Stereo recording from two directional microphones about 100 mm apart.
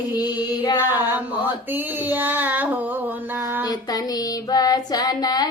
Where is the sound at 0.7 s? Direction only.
20° right (ahead or behind).